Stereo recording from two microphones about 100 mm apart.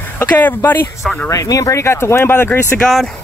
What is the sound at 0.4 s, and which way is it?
Speech, 20° left (ahead or behind).